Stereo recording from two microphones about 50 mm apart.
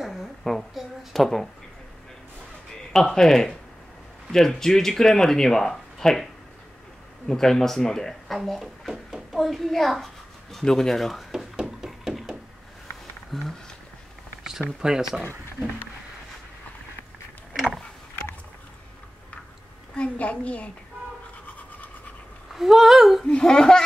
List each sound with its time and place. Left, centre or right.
0.0 s a sound: centre
2.9 s speech: centre
7.2 s a child's voice: centre
11.3 s a sound: centre
13.3 s speech: centre
14.8 s speech: centre
20.0 s a woman's voice: left
21.5 s toothbrush: left
22.5 s speech: centre
23.2 s speech: centre